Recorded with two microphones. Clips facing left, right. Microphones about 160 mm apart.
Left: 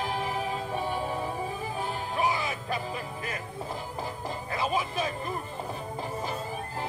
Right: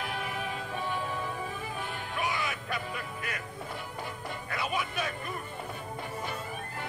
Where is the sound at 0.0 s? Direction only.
35° left (ahead or behind).